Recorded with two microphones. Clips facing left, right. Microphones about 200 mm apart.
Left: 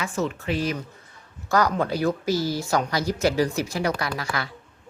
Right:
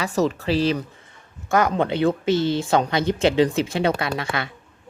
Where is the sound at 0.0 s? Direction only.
35° right (ahead or behind).